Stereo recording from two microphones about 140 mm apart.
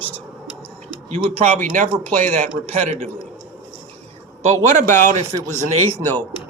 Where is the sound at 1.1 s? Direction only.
45° right (ahead or behind).